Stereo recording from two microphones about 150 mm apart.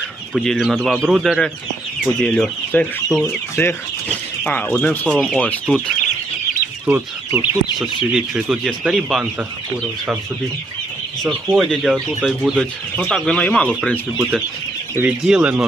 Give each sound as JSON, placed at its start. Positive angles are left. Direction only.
{"t": 0.3, "sound": "speech", "side_deg": 0}
{"t": 3.5, "sound": "speech", "side_deg": 15}
{"t": 6.8, "sound": "speech", "side_deg": -15}
{"t": 7.8, "sound": "speech", "side_deg": 0}
{"t": 11.2, "sound": "speech", "side_deg": 0}
{"t": 14.2, "sound": "speech", "side_deg": 0}